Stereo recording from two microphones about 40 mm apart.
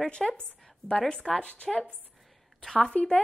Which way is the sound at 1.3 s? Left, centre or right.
Centre.